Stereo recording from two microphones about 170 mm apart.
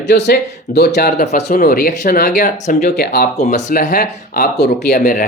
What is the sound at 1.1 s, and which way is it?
Speech, 45° left (ahead or behind).